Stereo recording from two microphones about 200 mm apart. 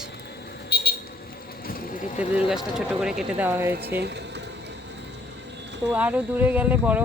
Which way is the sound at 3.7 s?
55° right (ahead or behind).